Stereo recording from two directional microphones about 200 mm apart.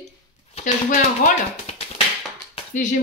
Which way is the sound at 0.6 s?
40° left (ahead or behind).